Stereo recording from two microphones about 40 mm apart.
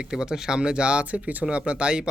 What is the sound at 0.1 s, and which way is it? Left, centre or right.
Speech, centre.